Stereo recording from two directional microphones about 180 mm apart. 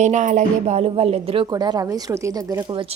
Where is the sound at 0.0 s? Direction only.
40° right (ahead or behind); by 2.8 s 15° right (ahead or behind).